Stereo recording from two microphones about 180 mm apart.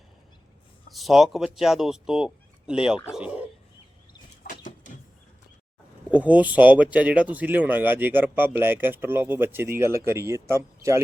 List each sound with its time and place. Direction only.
0.9 s speech: centre (ahead or behind)
4.4 s a sound: 45° left (ahead or behind)
6.1 s speech: 10° right (ahead or behind)